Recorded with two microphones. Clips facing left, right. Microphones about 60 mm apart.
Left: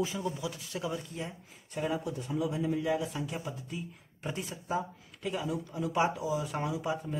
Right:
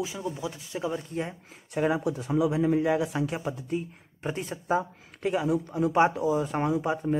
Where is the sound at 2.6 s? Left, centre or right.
Right.